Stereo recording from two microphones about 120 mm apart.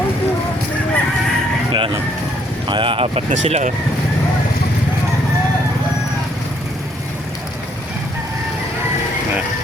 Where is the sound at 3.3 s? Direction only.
80° right.